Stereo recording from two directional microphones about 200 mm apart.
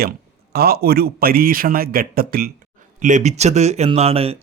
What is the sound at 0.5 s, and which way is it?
Speech, 50° right (ahead or behind).